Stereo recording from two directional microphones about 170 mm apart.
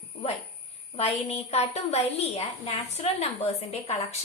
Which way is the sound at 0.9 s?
40° left (ahead or behind).